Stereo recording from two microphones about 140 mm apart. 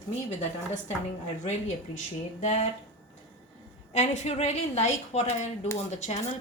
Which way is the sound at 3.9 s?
55° left (ahead or behind).